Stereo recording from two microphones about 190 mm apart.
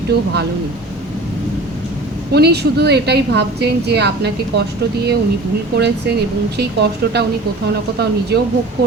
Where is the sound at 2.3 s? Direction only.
60° right (ahead or behind).